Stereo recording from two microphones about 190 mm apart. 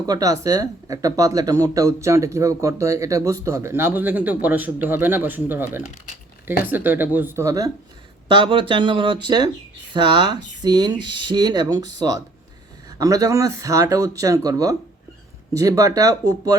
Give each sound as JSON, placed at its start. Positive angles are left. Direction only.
{"t": 0.0, "sound": "speech", "side_deg": -20}